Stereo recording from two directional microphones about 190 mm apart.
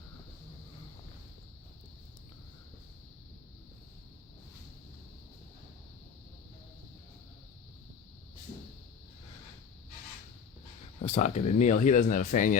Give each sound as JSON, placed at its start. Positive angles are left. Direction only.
{"t": 11.0, "sound": "speech", "side_deg": 35}